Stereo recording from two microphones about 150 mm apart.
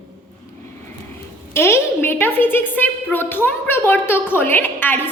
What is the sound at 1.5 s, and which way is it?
A woman's voice, 15° left (ahead or behind).